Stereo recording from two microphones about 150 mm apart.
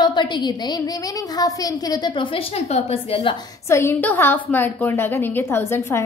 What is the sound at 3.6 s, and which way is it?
A woman's voice, 20° left (ahead or behind).